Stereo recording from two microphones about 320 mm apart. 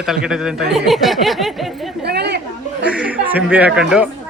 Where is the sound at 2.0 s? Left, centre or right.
Right.